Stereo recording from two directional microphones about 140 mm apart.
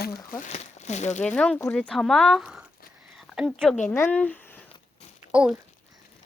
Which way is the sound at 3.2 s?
5° right (ahead or behind).